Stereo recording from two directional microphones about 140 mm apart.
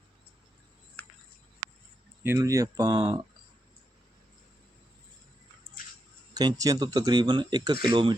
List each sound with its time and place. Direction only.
2.4 s speech: 25° right (ahead or behind)
6.3 s speech: 25° right (ahead or behind)